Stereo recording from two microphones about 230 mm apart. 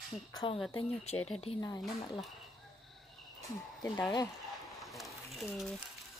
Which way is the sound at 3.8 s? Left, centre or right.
Centre.